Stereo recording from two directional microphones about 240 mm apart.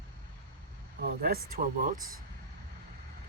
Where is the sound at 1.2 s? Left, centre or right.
Right.